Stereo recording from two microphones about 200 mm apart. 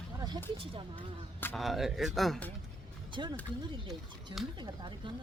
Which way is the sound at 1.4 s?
Centre (ahead or behind).